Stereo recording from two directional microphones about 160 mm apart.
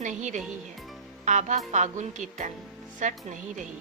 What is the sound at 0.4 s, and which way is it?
Music, centre (ahead or behind).